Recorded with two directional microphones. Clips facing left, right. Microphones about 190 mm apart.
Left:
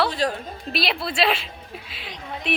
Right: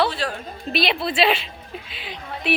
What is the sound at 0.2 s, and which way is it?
Speech, 40° left (ahead or behind).